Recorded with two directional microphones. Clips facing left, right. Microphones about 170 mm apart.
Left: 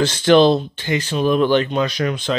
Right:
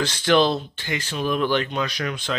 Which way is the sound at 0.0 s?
25° left (ahead or behind).